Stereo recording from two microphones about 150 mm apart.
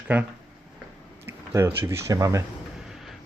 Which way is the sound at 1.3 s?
15° right (ahead or behind).